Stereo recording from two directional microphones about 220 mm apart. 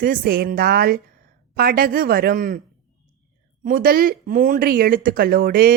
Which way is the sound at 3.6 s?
40° right (ahead or behind).